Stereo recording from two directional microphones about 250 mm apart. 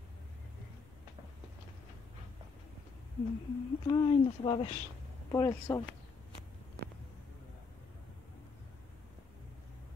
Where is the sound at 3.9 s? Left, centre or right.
Centre.